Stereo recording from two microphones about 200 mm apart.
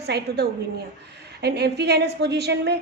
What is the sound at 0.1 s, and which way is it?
Speech, 55° right (ahead or behind).